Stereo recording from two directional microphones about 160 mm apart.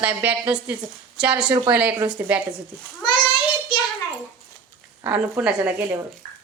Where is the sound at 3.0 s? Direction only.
30° left (ahead or behind).